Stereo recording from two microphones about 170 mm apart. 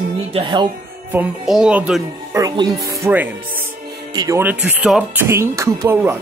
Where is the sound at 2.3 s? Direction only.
20° right (ahead or behind).